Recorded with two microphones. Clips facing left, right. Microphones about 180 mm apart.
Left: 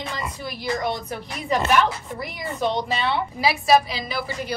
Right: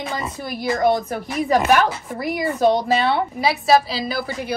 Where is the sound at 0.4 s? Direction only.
50° right (ahead or behind).